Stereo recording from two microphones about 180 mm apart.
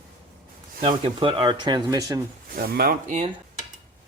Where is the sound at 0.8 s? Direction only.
30° right (ahead or behind).